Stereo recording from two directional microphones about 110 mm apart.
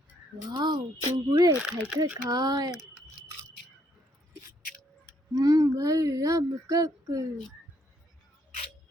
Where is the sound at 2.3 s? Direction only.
40° right (ahead or behind).